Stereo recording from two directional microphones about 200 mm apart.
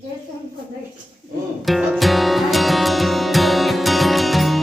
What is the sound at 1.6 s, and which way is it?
Music, centre (ahead or behind).